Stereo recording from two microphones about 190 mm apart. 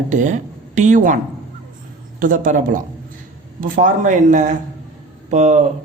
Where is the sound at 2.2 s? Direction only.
45° right (ahead or behind).